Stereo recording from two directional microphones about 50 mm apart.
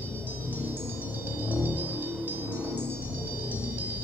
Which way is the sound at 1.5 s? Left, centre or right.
Right.